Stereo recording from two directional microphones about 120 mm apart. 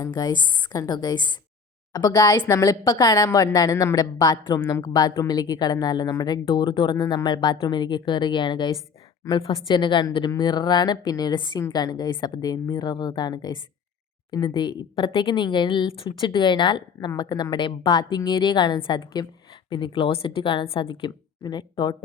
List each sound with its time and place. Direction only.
0.0 s a woman's voice: 35° left (ahead or behind)